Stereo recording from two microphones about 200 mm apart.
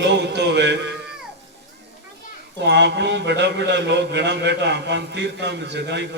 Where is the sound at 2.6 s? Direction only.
60° right (ahead or behind).